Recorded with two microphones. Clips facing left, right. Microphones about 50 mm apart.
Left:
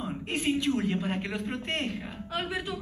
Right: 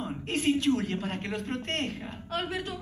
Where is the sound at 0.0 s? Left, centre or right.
Centre.